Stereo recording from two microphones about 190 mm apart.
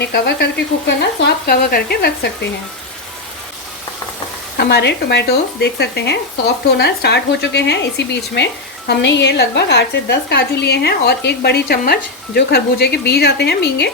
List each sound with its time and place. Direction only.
0.0 s a woman's voice: 60° left (ahead or behind)
4.5 s a woman's voice: 60° left (ahead or behind)